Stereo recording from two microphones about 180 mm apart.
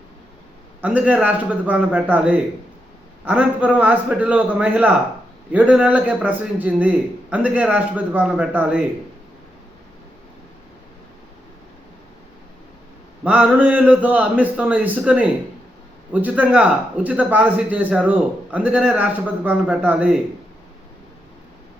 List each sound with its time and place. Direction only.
0.8 s speech: 10° right (ahead or behind)
13.2 s speech: 5° right (ahead or behind)